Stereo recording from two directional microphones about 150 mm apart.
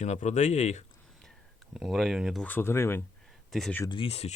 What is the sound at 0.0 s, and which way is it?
Speech, 50° left (ahead or behind).